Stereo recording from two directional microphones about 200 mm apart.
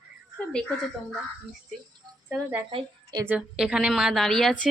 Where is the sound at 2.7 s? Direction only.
25° right (ahead or behind).